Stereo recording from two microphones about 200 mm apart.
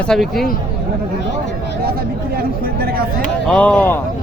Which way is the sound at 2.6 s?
50° right (ahead or behind).